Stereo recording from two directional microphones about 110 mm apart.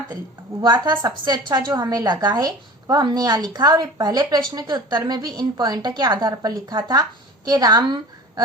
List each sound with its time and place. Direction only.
0.6 s a woman's voice: 40° right (ahead or behind)